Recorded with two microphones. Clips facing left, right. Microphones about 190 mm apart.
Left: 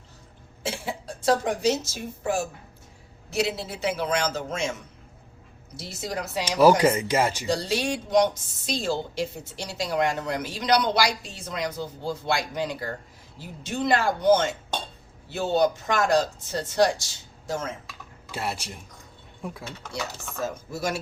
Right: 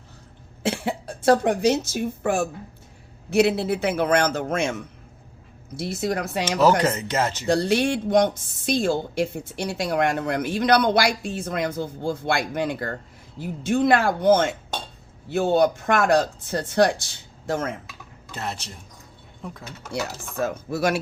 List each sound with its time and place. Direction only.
0.6 s speech: 60° right (ahead or behind)
6.6 s speech: 10° left (ahead or behind)
7.4 s speech: 60° right (ahead or behind)
18.3 s speech: 10° left (ahead or behind)
20.4 s speech: 60° right (ahead or behind)